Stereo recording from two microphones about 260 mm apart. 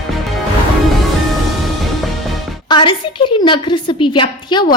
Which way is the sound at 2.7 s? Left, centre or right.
Centre.